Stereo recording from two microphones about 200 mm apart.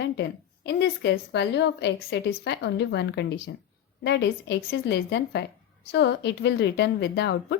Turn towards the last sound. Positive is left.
turn(degrees=60)  # may be behind; listen again after turning